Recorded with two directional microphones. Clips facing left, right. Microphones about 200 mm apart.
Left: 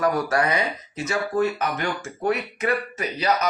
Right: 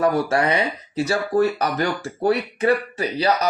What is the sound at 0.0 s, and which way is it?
Speech, 30° right (ahead or behind).